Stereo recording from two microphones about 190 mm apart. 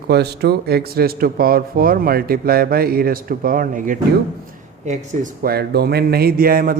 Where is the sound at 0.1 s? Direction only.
60° right (ahead or behind).